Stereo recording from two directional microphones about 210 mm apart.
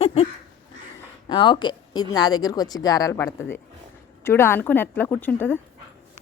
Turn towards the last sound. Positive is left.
turn(degrees=10)  # may be behind; listen again after turning